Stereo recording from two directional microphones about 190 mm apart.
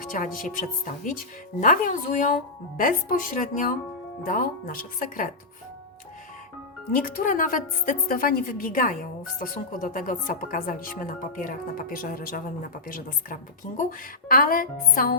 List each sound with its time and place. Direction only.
0.0 s speech: 45° left (ahead or behind)
1.6 s speech: 45° left (ahead or behind)
6.9 s speech: 50° left (ahead or behind)